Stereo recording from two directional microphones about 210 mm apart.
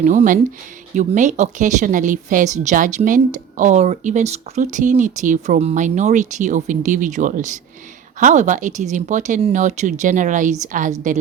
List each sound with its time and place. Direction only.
0.0 s speech: 35° right (ahead or behind)